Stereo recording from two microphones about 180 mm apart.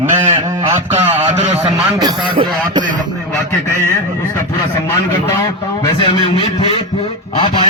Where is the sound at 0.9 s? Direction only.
35° right (ahead or behind).